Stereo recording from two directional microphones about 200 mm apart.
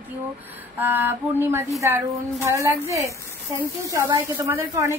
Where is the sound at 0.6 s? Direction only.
10° right (ahead or behind).